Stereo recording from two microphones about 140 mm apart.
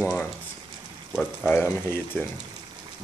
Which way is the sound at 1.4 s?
15° left (ahead or behind).